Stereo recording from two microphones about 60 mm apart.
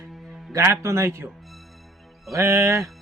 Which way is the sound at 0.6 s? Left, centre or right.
Right.